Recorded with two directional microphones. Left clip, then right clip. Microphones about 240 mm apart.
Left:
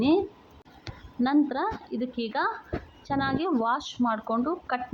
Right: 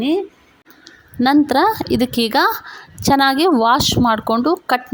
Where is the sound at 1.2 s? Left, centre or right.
Right.